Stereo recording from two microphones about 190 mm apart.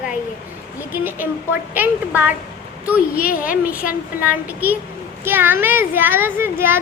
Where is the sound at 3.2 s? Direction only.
50° left (ahead or behind).